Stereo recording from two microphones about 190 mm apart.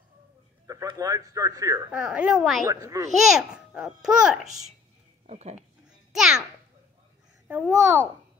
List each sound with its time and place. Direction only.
0.7 s speech: 20° right (ahead or behind)
1.9 s a child's voice: 5° right (ahead or behind)
2.6 s a child's voice: 20° right (ahead or behind)
3.2 s a child's voice: centre (ahead or behind)
5.2 s speech: 35° right (ahead or behind)
6.1 s a child's voice: centre (ahead or behind)
7.4 s a child's voice: 10° right (ahead or behind)